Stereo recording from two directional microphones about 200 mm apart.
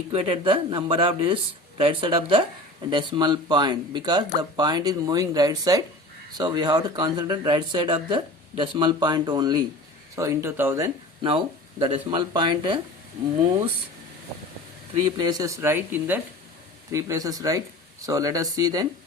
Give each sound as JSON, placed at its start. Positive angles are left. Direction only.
{"t": 0.1, "sound": "speech", "side_deg": -25}
{"t": 15.0, "sound": "speech", "side_deg": -20}